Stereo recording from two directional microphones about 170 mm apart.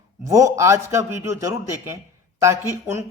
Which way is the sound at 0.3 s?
20° right (ahead or behind).